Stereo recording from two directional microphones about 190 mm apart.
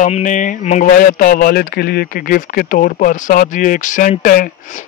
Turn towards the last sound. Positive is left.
turn(degrees=45)  # may be behind; listen again after turning